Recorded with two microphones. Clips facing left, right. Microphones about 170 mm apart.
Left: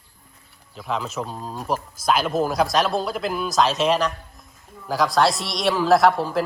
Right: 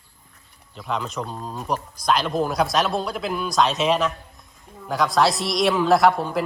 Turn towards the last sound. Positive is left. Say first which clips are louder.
# left 1 dB
turn(degrees=0)  # may be behind; listen again after turning